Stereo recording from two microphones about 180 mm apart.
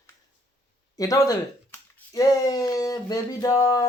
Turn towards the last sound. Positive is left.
turn(degrees=20)  # may be behind; listen again after turning